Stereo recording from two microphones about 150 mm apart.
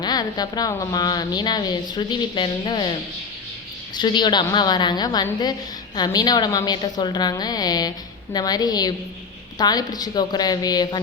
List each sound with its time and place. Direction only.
0.0 s a woman's voice: 25° left (ahead or behind)